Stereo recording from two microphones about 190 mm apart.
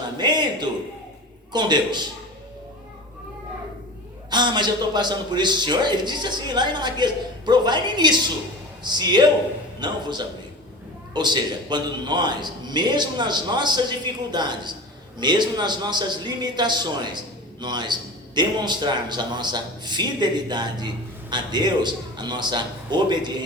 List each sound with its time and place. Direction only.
0.2 s a sound: 25° right (ahead or behind)
1.5 s a man's voice: 25° right (ahead or behind)
4.3 s a man's voice: 25° right (ahead or behind)